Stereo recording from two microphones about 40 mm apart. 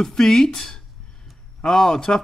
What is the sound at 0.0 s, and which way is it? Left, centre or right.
Speech, centre.